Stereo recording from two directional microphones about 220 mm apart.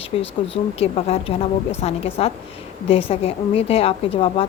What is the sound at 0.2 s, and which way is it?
A woman's voice, 25° left (ahead or behind).